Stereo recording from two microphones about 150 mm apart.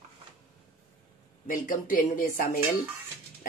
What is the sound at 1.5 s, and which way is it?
Speech, 65° left (ahead or behind).